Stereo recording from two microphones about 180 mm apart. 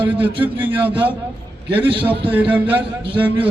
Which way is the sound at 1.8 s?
30° right (ahead or behind).